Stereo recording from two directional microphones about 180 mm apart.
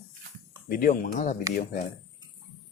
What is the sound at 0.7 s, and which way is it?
Speech, 50° left (ahead or behind).